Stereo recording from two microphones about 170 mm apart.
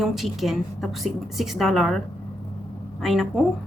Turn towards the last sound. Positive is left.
turn(degrees=0)  # may be behind; listen again after turning